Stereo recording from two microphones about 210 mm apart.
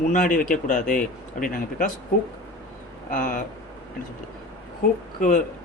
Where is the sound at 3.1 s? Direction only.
40° left (ahead or behind).